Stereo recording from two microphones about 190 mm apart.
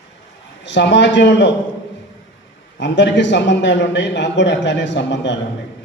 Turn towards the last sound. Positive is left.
turn(degrees=70)  # may be behind; listen again after turning